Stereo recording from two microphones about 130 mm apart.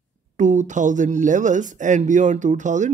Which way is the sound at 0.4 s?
70° right (ahead or behind).